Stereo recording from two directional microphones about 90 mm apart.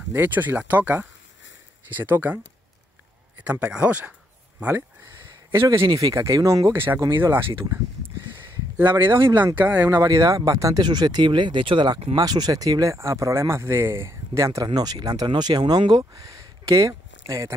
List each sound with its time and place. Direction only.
0.1 s speech: 20° right (ahead or behind)
3.4 s speech: 15° right (ahead or behind)
5.6 s speech: 30° right (ahead or behind)
5.9 s speech: 40° right (ahead or behind); by 9.9 s 20° right (ahead or behind)
9.9 s speech: 40° right (ahead or behind)
10.8 s speech: 50° right (ahead or behind)
12.2 s speech: 45° right (ahead or behind)
14.7 s speech: 45° right (ahead or behind)